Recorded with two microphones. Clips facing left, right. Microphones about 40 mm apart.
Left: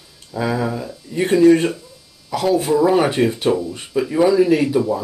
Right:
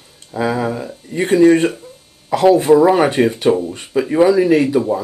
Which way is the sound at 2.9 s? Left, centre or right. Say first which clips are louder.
Right 2 dB; centre.